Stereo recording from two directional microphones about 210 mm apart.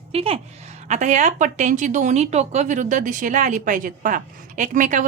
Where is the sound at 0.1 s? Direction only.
25° right (ahead or behind).